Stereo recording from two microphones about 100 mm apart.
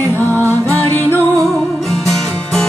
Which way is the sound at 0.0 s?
25° left (ahead or behind).